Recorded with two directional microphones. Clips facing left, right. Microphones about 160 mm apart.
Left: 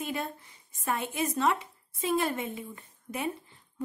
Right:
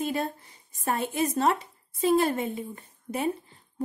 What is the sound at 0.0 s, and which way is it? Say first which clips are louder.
Speech: right 5 dB; 35° right (ahead or behind).